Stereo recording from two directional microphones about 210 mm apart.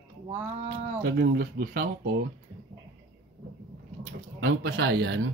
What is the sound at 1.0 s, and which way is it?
Speech, 55° right (ahead or behind).